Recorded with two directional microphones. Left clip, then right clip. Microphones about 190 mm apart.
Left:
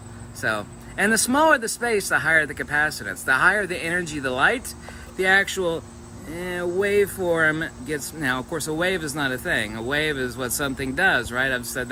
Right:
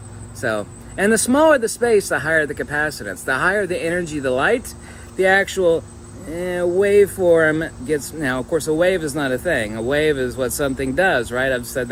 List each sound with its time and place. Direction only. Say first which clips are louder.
0.4 s speech: right 3 dB; 15° left (ahead or behind)